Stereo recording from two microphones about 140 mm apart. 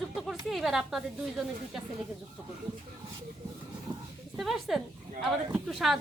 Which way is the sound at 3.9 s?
35° right (ahead or behind).